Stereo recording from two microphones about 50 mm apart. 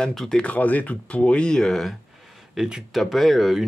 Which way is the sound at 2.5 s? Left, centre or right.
Centre.